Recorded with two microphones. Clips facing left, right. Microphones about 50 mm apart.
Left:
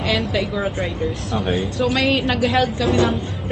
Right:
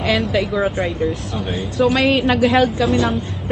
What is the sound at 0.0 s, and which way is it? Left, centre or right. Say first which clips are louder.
A woman's voice: right 3 dB; centre.